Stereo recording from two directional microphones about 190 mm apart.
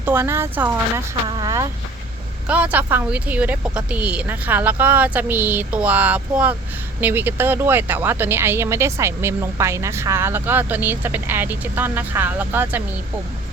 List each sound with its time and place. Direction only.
0.0 s speech: 10° right (ahead or behind)